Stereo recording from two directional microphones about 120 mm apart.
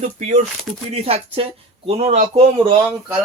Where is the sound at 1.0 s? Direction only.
55° right (ahead or behind).